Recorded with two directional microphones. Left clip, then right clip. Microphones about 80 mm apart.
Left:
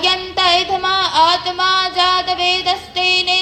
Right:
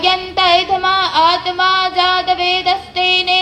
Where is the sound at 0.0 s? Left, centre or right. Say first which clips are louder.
Right 2 dB; left.